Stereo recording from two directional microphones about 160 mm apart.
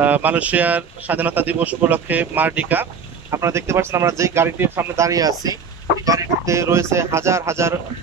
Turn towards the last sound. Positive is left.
turn(degrees=-15)  # may be behind; listen again after turning